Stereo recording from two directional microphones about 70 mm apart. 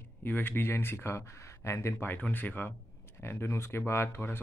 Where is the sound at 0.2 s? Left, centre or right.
Left.